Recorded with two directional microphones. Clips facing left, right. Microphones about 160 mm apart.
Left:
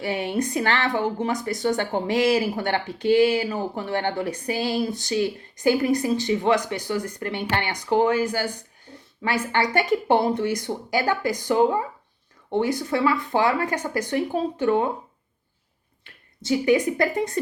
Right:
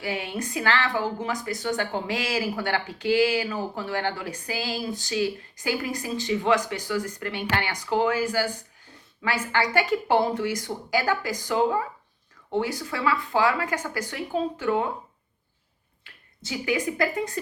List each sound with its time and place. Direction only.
0.0 s speech: 30° left (ahead or behind)
1.2 s speech: 35° left (ahead or behind)
16.5 s speech: 35° left (ahead or behind)